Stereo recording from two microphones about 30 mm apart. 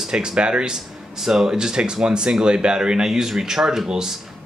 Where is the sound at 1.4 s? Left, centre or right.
Right.